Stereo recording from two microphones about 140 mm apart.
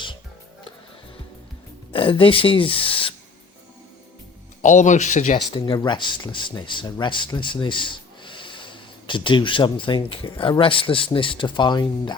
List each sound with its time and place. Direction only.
1.9 s speech: 40° left (ahead or behind)
4.6 s speech: 60° left (ahead or behind)
5.5 s speech: 35° left (ahead or behind)